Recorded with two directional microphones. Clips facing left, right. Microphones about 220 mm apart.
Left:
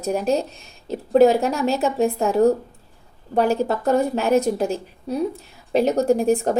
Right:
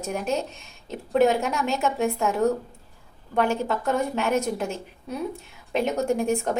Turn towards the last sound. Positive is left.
turn(degrees=35)  # may be behind; listen again after turning